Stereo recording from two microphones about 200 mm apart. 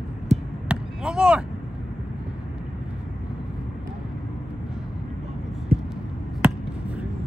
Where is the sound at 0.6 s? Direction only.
5° right (ahead or behind).